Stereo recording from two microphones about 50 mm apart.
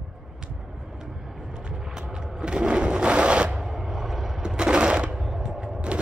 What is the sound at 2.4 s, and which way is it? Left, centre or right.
Sewing machine, centre.